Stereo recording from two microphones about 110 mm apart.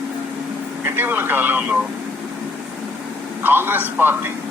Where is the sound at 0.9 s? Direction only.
15° right (ahead or behind).